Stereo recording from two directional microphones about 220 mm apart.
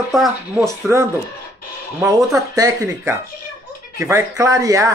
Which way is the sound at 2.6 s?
15° right (ahead or behind).